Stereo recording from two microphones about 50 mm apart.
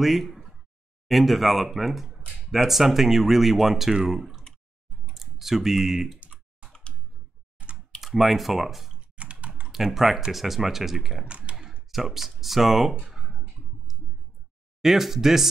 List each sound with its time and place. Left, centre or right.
0.0 s speech: centre
6.1 s typing: right
8.0 s speech: centre
9.1 s typing: right
9.7 s speech: centre
11.2 s speech: right
11.9 s speech: centre
13.1 s clicking: centre
14.8 s speech: centre